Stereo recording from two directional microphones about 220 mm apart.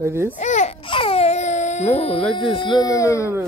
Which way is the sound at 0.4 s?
30° left (ahead or behind).